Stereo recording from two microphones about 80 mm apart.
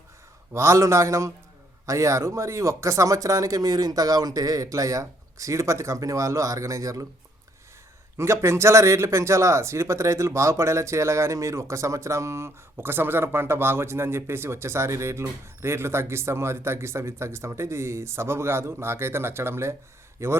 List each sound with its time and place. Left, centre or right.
0.5 s speech: right
8.2 s speech: right